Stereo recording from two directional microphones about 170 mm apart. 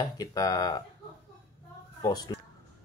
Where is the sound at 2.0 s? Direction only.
25° left (ahead or behind).